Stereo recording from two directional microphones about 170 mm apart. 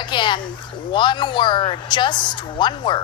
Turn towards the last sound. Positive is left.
turn(degrees=25)  # may be behind; listen again after turning